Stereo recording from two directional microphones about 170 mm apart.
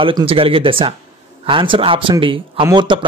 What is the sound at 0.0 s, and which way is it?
Speech, 30° right (ahead or behind).